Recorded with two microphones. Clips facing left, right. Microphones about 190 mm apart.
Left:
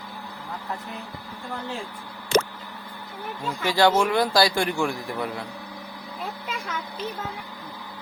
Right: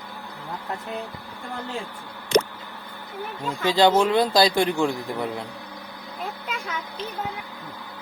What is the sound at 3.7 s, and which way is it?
A man's voice, 20° right (ahead or behind).